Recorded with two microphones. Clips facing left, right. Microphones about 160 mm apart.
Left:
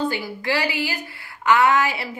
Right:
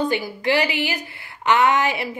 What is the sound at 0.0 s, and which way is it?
A woman's voice, 20° right (ahead or behind).